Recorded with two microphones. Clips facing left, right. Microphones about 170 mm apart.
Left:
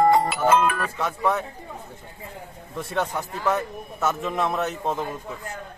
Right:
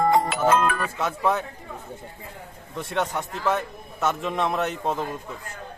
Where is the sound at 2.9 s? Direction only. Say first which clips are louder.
Even; centre (ahead or behind).